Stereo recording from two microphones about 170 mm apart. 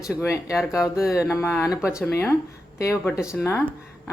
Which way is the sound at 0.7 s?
15° left (ahead or behind).